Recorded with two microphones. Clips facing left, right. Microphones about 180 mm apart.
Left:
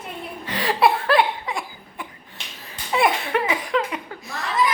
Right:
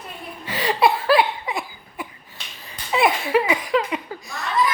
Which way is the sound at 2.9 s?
Centre (ahead or behind).